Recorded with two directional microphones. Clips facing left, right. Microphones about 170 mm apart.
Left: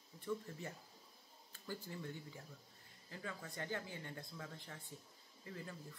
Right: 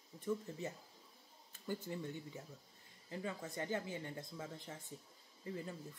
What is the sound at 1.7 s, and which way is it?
Speech, 20° right (ahead or behind).